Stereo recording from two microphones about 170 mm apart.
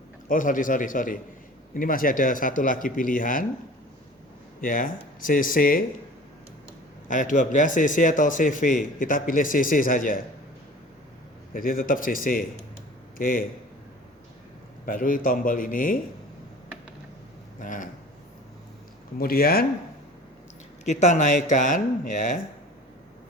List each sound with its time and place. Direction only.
0.3 s speech: 50° left (ahead or behind)
4.6 s speech: 55° left (ahead or behind)
7.1 s speech: 50° left (ahead or behind)
11.5 s speech: 55° left (ahead or behind)
14.8 s speech: 55° left (ahead or behind)
17.6 s speech: 50° left (ahead or behind)
19.2 s speech: 60° left (ahead or behind)
20.8 s speech: 45° left (ahead or behind)